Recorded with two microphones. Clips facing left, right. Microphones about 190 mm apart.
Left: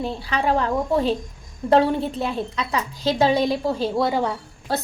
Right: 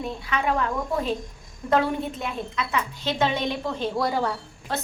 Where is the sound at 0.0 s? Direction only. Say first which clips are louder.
Left 3 dB; 30° left (ahead or behind).